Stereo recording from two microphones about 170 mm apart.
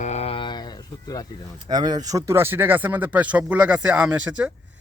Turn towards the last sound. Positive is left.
turn(degrees=-5)  # may be behind; listen again after turning